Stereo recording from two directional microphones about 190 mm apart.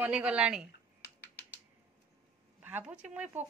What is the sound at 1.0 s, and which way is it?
Typing, 60° left (ahead or behind).